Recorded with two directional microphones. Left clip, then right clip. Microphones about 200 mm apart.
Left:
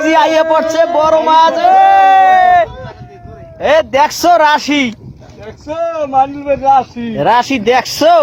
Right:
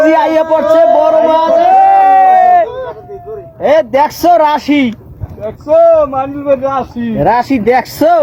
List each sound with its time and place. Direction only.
0.0 s speech: 5° right (ahead or behind)
1.7 s a sound: centre (ahead or behind)
3.6 s speech: centre (ahead or behind)
5.7 s a man's voice: 50° right (ahead or behind)
7.2 s speech: centre (ahead or behind)